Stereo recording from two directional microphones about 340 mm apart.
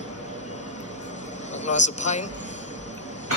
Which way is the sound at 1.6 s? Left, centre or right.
Left.